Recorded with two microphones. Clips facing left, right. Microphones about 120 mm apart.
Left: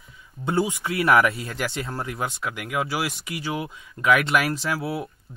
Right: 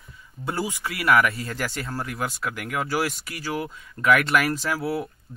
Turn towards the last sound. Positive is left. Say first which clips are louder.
# right 2 dB
turn(degrees=0)  # may be behind; listen again after turning